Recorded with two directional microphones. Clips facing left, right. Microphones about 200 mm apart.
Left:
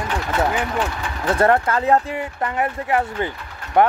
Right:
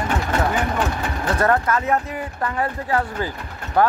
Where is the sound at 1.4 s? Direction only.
30° left (ahead or behind).